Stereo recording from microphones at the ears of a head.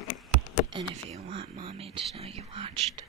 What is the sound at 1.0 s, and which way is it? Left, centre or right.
Whispering, right.